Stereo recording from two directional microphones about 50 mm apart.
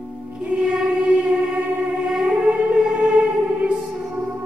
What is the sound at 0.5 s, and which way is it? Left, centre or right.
Choir, right.